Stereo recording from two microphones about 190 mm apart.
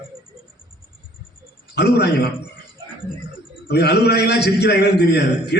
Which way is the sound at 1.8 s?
60° left (ahead or behind).